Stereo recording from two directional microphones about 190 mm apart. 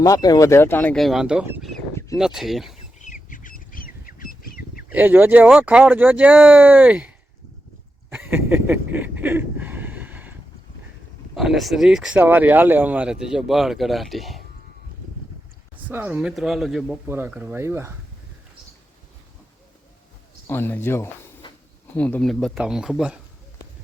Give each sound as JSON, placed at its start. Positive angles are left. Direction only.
{"t": 0.0, "sound": "speech", "side_deg": 20}
{"t": 2.7, "sound": "bird", "side_deg": 40}
{"t": 4.8, "sound": "speech", "side_deg": -10}
{"t": 8.1, "sound": "a sound", "side_deg": -10}
{"t": 11.3, "sound": "speech", "side_deg": 0}
{"t": 15.9, "sound": "speech", "side_deg": -10}
{"t": 20.5, "sound": "speech", "side_deg": 10}
{"t": 21.4, "sound": "a sound", "side_deg": 25}
{"t": 21.9, "sound": "speech", "side_deg": 5}